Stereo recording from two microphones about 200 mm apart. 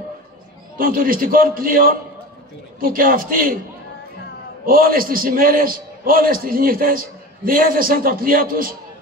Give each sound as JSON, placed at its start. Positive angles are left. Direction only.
{"t": 0.7, "sound": "a man's voice", "side_deg": -45}
{"t": 4.6, "sound": "a man's voice", "side_deg": -45}